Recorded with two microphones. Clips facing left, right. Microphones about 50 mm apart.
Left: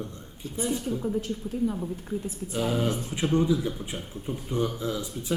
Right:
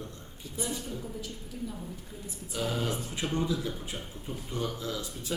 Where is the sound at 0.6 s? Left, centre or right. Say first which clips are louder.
Left 7 dB; left.